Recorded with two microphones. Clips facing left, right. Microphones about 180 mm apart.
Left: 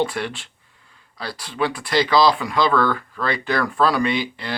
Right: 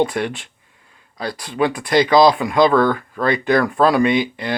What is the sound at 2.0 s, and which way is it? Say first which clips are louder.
Speech: right 4 dB; 50° right (ahead or behind).